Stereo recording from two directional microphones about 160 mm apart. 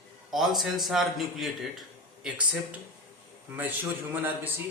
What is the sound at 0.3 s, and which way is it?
A man's voice, centre (ahead or behind).